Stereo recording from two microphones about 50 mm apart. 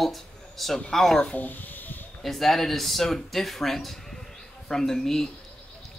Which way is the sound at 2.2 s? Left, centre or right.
Centre.